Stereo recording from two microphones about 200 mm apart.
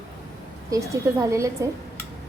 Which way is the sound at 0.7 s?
15° right (ahead or behind).